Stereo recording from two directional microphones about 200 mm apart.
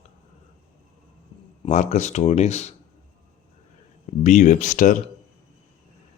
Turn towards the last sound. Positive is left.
turn(degrees=40)  # may be behind; listen again after turning